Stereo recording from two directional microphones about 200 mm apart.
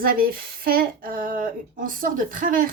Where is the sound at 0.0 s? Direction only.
45° right (ahead or behind).